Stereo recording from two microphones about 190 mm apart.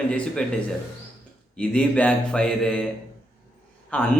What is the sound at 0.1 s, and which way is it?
Speech, 5° left (ahead or behind).